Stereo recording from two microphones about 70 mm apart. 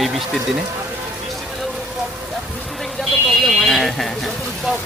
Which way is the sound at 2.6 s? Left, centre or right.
Centre.